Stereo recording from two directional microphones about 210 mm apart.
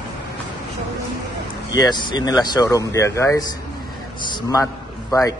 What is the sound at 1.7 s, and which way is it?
A man's voice, 20° left (ahead or behind).